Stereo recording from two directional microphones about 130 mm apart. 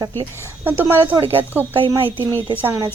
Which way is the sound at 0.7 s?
15° right (ahead or behind).